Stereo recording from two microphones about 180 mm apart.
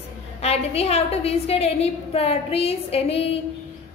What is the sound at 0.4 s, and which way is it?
A woman's voice, 35° left (ahead or behind).